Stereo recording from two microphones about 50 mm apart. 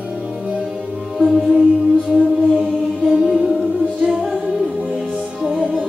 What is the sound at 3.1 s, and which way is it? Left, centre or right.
Music, centre.